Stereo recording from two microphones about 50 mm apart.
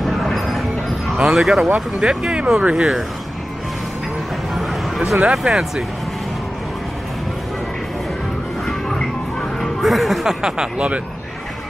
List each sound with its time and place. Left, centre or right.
0.0 s music: centre
1.1 s speech: centre
2.0 s speech: centre
4.6 s a sound: centre
5.2 s speech: centre
8.6 s a sound: centre
9.6 s speech: centre